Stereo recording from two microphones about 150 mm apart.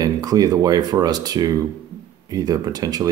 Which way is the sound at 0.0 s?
25° right (ahead or behind).